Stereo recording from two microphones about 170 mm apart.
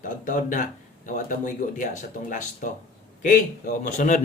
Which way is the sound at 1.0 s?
50° left (ahead or behind).